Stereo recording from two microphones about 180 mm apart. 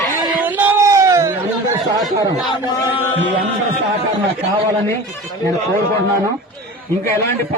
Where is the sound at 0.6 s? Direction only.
15° right (ahead or behind).